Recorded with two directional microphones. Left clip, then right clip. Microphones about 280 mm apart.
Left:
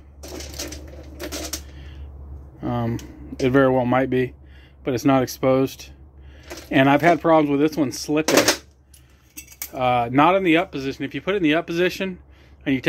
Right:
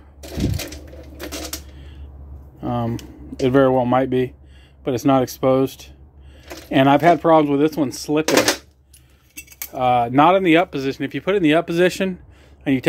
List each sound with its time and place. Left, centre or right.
2.6 s speech: centre
9.7 s speech: centre